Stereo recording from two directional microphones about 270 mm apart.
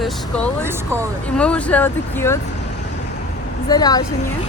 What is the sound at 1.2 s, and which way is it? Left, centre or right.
Speech, centre.